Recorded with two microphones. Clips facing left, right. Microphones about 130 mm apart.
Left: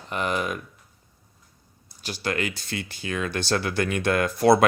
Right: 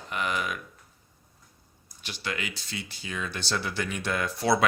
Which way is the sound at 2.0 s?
40° left (ahead or behind).